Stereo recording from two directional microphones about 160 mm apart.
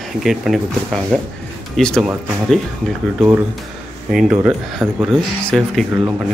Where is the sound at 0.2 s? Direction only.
Centre (ahead or behind).